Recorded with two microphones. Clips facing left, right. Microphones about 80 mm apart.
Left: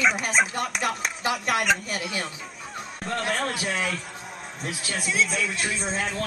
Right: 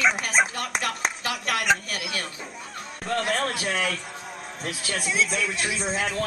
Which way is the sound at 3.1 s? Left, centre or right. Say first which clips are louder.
Right 2 dB; centre.